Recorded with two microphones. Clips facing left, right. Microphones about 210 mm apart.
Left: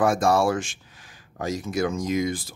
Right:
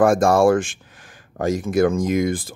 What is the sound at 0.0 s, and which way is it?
Speech, 50° right (ahead or behind).